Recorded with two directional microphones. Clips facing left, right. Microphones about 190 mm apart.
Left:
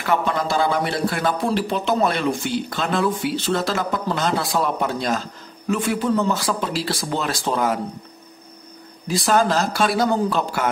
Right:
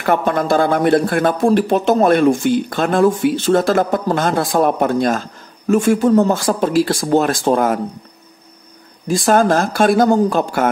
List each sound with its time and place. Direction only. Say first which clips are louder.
0.0 s speech: right 5 dB; 50° right (ahead or behind)
9.0 s speech: right 5 dB; 50° right (ahead or behind)